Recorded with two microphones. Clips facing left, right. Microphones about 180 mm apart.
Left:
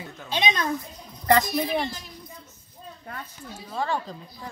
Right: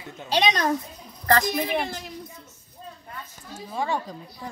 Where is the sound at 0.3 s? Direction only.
90° right.